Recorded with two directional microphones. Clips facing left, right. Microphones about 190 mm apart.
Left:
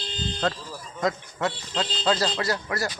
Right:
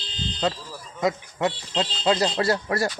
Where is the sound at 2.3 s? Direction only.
30° right (ahead or behind).